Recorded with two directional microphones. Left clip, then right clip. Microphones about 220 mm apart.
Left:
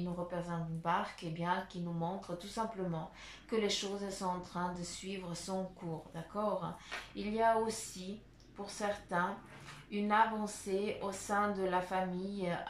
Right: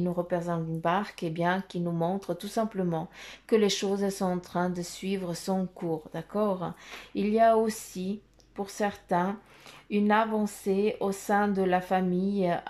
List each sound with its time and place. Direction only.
0.0 s speech: 45° right (ahead or behind)